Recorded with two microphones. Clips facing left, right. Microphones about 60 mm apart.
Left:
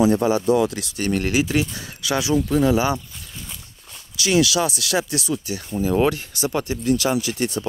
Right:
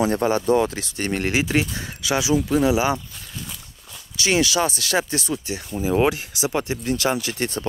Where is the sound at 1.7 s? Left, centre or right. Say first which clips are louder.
Even; right.